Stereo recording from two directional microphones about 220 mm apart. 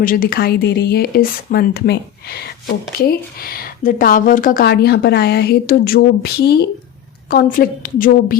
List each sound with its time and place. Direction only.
0.0 s a woman's voice: 40° left (ahead or behind)